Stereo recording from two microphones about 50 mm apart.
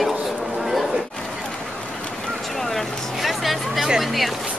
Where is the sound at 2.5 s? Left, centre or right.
Centre.